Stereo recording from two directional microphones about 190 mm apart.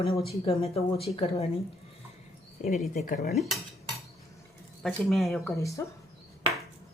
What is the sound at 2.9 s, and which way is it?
Speech, 45° left (ahead or behind).